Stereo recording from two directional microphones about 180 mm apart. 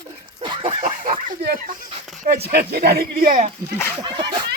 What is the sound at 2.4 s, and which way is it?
Speech, 65° right (ahead or behind).